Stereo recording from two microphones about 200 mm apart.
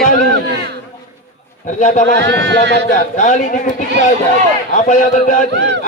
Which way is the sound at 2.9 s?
40° left (ahead or behind).